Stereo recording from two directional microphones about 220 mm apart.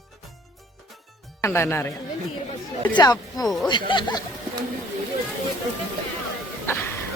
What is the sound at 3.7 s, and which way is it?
Speech, 20° left (ahead or behind).